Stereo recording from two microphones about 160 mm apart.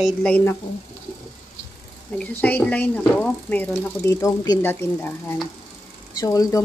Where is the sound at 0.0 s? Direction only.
5° left (ahead or behind).